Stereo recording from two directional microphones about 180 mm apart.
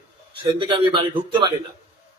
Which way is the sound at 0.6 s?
25° right (ahead or behind).